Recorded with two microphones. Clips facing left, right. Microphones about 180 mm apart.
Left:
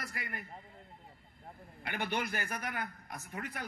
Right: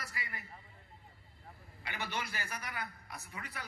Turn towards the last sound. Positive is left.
turn(degrees=50)  # may be behind; listen again after turning